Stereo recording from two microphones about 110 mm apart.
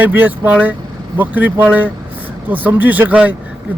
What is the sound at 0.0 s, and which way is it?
Speech, 15° right (ahead or behind).